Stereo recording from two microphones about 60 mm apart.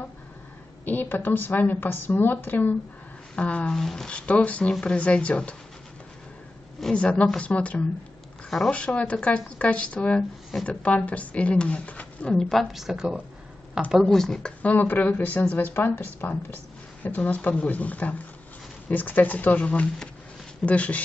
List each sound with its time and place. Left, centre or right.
0.8 s a woman's voice: left
3.7 s speech: centre
4.3 s speech: left
6.8 s speech: centre
8.5 s speech: centre
8.7 s speech: centre
12.4 s a woman's voice: centre
14.0 s speech: centre
14.6 s speech: left